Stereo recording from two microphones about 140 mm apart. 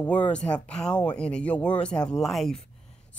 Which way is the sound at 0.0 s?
10° left (ahead or behind).